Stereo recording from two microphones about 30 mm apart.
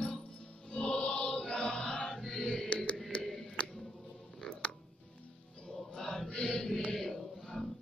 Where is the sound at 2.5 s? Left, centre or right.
Left.